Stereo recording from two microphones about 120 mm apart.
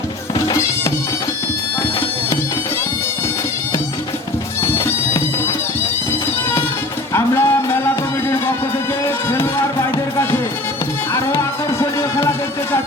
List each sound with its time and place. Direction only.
0.4 s music: 25° left (ahead or behind)
4.6 s bagpipes: 25° left (ahead or behind)
7.1 s music: 20° left (ahead or behind)
11.8 s music: 25° left (ahead or behind)